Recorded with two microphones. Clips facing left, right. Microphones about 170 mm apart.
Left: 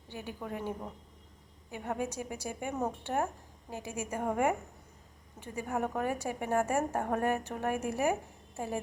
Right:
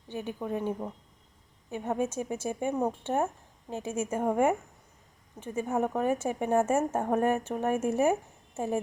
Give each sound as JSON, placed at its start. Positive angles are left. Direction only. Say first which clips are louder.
{"t": 0.1, "sound": "a woman's voice", "louder": "right 6 dB", "side_deg": -20}